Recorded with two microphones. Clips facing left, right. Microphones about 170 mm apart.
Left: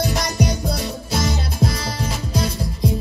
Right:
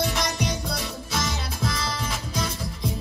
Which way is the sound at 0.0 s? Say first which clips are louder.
Left 5 dB; 40° left (ahead or behind).